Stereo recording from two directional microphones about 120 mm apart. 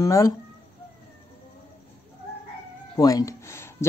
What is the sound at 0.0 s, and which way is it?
Speech, 30° left (ahead or behind).